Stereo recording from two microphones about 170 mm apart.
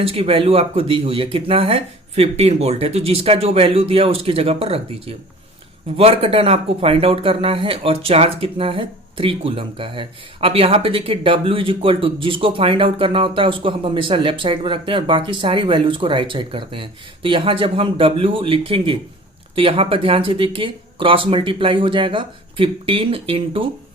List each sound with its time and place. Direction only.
0.0 s speech: 35° right (ahead or behind)